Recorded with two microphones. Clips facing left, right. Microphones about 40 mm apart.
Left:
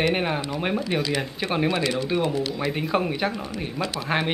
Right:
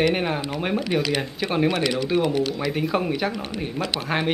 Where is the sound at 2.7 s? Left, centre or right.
Centre.